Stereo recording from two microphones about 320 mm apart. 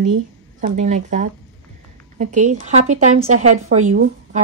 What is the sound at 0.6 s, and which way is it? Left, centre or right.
Speech, right.